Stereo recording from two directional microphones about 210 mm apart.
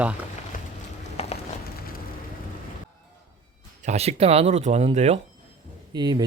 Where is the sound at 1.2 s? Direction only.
30° left (ahead or behind).